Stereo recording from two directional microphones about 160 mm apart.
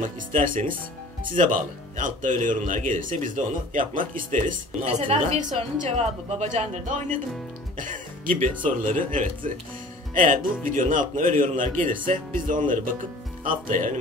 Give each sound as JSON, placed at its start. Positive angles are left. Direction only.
{"t": 0.0, "sound": "speech", "side_deg": -50}
{"t": 4.9, "sound": "a woman's voice", "side_deg": -35}
{"t": 5.2, "sound": "speech", "side_deg": -45}